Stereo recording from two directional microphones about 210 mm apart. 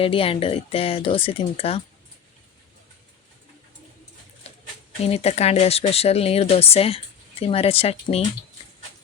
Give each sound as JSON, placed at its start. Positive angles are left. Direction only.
{"t": 0.0, "sound": "speech", "side_deg": 25}
{"t": 5.0, "sound": "speech", "side_deg": 30}